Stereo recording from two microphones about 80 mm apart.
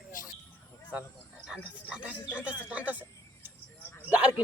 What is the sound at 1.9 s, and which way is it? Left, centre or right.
Speech, centre.